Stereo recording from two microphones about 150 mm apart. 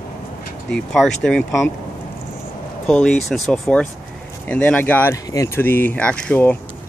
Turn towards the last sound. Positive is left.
turn(degrees=10)  # may be behind; listen again after turning